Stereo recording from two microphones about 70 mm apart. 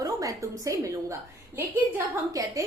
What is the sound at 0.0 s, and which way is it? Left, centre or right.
Speech, right.